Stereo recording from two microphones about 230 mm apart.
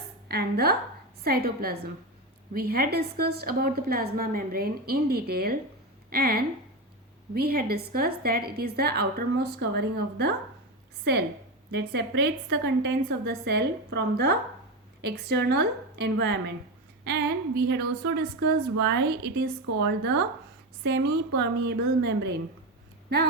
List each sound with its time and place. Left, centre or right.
0.3 s a woman's voice: right
11.7 s a woman's voice: right